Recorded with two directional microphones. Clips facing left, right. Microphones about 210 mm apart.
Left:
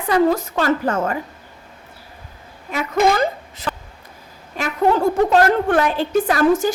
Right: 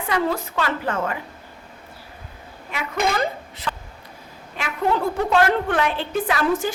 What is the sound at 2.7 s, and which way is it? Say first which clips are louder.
Speech: left 6 dB; 40° left (ahead or behind).